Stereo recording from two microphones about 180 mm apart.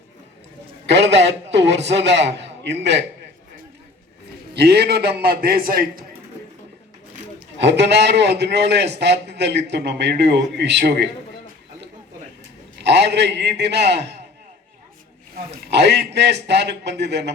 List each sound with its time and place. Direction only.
0.9 s a man's voice: 75° right (ahead or behind)
4.5 s a man's voice: 65° right (ahead or behind)
7.6 s a man's voice: 70° right (ahead or behind)
12.8 s a man's voice: 70° right (ahead or behind)
15.7 s a man's voice: 70° right (ahead or behind)